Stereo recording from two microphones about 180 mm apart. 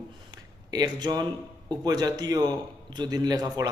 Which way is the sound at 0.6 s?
20° right (ahead or behind).